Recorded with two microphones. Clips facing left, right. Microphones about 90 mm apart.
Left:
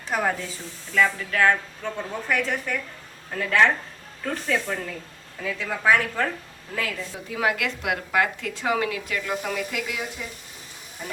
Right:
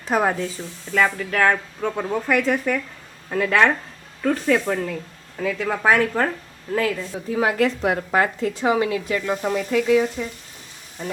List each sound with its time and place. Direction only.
0.0 s speech: 40° right (ahead or behind); by 4.6 s 60° right (ahead or behind)
5.4 s a woman's voice: 45° right (ahead or behind)